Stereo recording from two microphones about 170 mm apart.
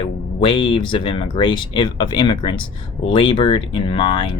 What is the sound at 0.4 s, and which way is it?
Speech, 35° left (ahead or behind).